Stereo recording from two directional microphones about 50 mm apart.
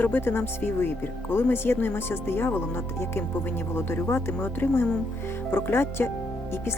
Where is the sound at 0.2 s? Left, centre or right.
Left.